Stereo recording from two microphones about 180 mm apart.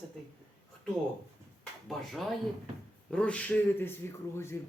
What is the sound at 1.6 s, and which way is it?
Speech, centre (ahead or behind).